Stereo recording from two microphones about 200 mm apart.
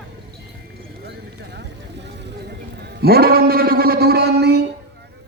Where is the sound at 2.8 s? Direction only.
55° right (ahead or behind).